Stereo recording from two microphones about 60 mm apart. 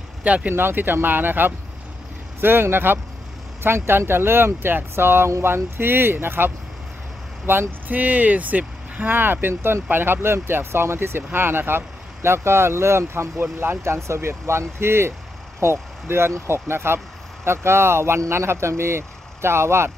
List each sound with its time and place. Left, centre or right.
0.2 s speech: right
0.6 s speech: right
7.9 s speech: right